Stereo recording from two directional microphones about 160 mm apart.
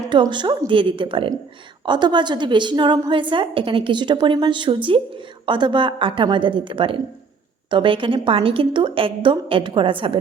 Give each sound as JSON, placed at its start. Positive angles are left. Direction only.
{"t": 0.1, "sound": "a woman's voice", "side_deg": -30}